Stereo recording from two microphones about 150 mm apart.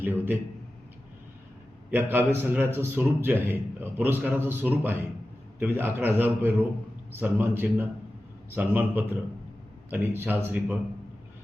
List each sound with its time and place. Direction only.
0.0 s a man's voice: 10° right (ahead or behind)
1.9 s a man's voice: 15° right (ahead or behind)